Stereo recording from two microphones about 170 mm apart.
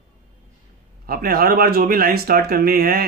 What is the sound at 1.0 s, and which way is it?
Speech, 60° right (ahead or behind).